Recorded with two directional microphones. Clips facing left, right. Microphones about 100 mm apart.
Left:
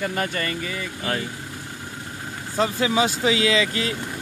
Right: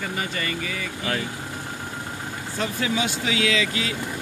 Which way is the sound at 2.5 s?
35° left (ahead or behind).